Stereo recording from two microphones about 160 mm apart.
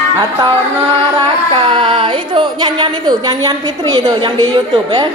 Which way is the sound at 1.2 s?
30° right (ahead or behind).